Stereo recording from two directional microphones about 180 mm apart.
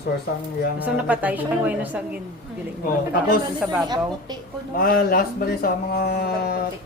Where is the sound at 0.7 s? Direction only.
10° right (ahead or behind).